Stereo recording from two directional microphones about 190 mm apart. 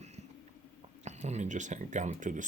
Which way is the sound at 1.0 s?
35° right (ahead or behind).